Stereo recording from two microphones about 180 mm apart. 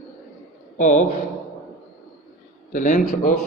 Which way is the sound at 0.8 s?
45° left (ahead or behind).